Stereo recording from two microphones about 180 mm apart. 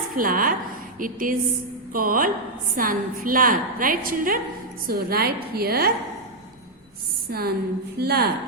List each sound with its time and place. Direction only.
0.2 s a woman's voice: 50° right (ahead or behind)
7.3 s a woman's voice: 60° right (ahead or behind)